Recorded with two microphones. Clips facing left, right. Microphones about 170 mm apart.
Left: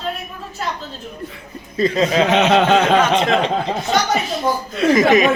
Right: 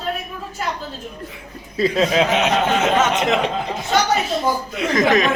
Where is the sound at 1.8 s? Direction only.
5° right (ahead or behind).